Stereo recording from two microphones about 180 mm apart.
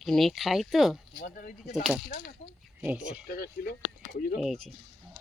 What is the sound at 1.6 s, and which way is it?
Speech, 5° right (ahead or behind).